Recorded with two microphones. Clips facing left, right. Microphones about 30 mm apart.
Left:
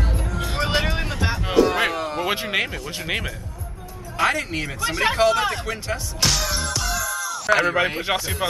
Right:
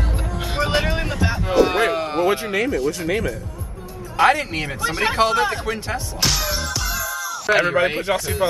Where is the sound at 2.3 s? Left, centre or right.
Left.